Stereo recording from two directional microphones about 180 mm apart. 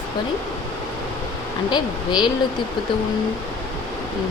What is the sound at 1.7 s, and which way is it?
Speech, 25° left (ahead or behind).